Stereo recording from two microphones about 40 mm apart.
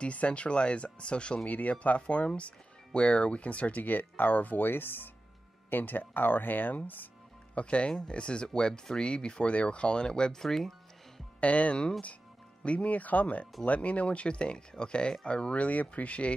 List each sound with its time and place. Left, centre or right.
0.0 s speech: left
1.5 s speech: left
7.5 s speech: left; by 10.7 s centre
11.4 s speech: left